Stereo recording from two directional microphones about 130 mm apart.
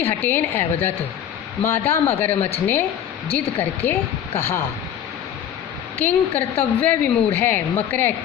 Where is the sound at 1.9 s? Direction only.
15° left (ahead or behind).